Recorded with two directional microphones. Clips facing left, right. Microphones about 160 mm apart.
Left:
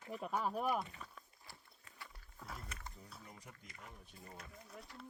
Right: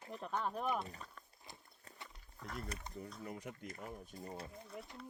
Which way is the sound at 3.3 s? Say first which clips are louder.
Right 10 dB; 65° right (ahead or behind).